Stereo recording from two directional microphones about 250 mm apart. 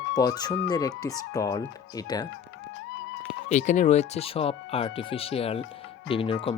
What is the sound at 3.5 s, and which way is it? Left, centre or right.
Speech, left.